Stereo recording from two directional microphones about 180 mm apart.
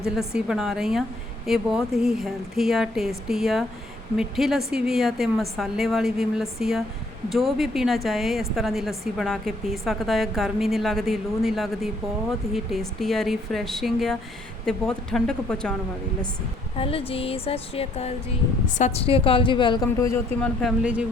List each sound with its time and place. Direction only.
0.0 s a woman's voice: 5° right (ahead or behind)
16.7 s a woman's voice: 30° left (ahead or behind)
20.4 s a woman's voice: centre (ahead or behind)